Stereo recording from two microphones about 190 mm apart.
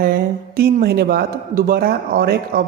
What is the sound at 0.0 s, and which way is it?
Speech, 50° right (ahead or behind).